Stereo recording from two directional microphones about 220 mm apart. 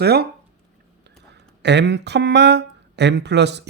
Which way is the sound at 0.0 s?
45° right (ahead or behind).